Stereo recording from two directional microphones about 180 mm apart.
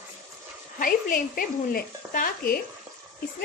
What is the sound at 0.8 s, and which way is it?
A woman's voice, 50° left (ahead or behind).